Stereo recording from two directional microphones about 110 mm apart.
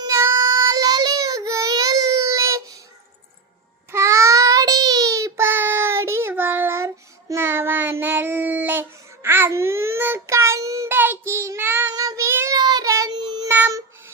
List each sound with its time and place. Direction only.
0.0 s child singing: 25° right (ahead or behind)
3.9 s child singing: 25° right (ahead or behind)
11.9 s child singing: 35° right (ahead or behind)
12.5 s child singing: 40° right (ahead or behind)